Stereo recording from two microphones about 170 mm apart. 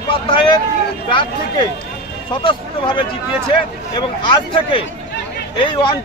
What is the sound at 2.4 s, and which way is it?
Speech, 30° left (ahead or behind).